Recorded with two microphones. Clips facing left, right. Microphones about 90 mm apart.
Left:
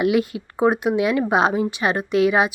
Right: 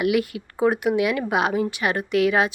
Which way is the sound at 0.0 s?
25° left (ahead or behind).